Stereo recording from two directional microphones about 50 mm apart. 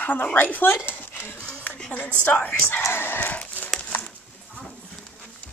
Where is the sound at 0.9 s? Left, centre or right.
Left.